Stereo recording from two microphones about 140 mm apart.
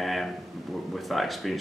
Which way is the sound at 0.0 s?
Centre (ahead or behind).